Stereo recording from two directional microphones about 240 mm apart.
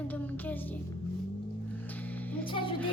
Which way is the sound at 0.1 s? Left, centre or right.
Centre.